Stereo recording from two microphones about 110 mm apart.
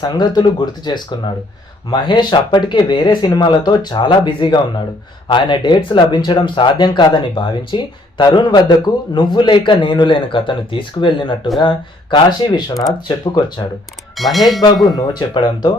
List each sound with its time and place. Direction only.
0.0 s a man's voice: 40° left (ahead or behind)
14.2 s speech: centre (ahead or behind)
14.9 s speech: 35° left (ahead or behind)